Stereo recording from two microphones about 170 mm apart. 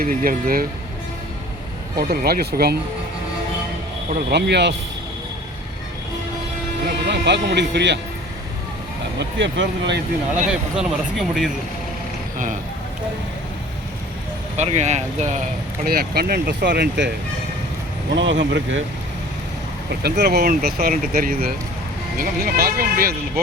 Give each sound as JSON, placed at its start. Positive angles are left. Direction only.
{"t": 0.0, "sound": "speech", "side_deg": -55}
{"t": 2.0, "sound": "speech", "side_deg": -65}
{"t": 4.3, "sound": "speech", "side_deg": -80}
{"t": 6.8, "sound": "speech", "side_deg": -90}
{"t": 9.1, "sound": "speech", "side_deg": -90}
{"t": 10.5, "sound": "speech", "side_deg": -5}
{"t": 14.5, "sound": "speech", "side_deg": -40}
{"t": 15.8, "sound": "speech", "side_deg": -65}
{"t": 18.1, "sound": "speech", "side_deg": -90}
{"t": 20.0, "sound": "speech", "side_deg": -70}